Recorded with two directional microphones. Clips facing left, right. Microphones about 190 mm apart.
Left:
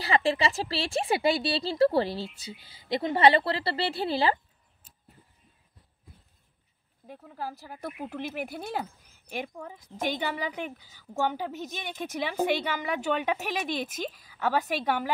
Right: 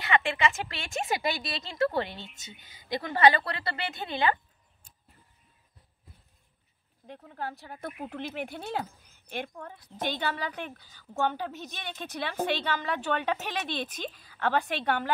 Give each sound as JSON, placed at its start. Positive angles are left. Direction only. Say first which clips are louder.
{"t": 0.0, "sound": "speech", "louder": "left 2 dB", "side_deg": 35}
{"t": 7.1, "sound": "speech", "louder": "even", "side_deg": 5}